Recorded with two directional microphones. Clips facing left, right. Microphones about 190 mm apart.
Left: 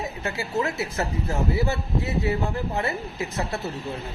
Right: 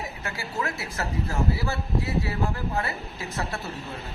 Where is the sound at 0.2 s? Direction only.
20° left (ahead or behind).